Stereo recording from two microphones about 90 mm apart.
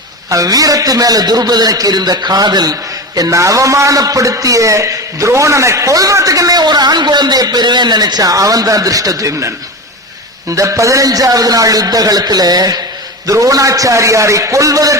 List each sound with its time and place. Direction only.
0.3 s a man's voice: 40° right (ahead or behind)
3.2 s a man's voice: 35° right (ahead or behind)
6.6 s a man's voice: 50° right (ahead or behind)
10.5 s a man's voice: 35° right (ahead or behind)